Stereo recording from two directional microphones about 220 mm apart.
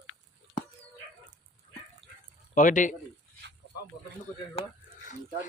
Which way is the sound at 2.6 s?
35° left (ahead or behind).